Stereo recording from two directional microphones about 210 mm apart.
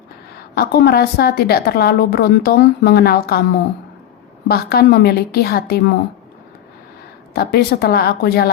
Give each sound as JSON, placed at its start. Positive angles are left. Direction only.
{"t": 0.5, "sound": "a woman's voice", "side_deg": 50}
{"t": 4.4, "sound": "a woman's voice", "side_deg": 50}
{"t": 7.3, "sound": "a woman's voice", "side_deg": 50}